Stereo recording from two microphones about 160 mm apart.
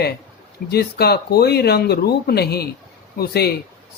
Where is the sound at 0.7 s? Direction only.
80° left.